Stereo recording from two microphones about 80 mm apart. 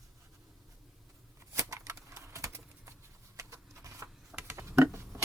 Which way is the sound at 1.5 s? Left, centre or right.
Right.